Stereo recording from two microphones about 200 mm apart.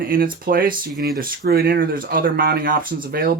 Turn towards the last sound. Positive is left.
turn(degrees=-45)  # may be behind; listen again after turning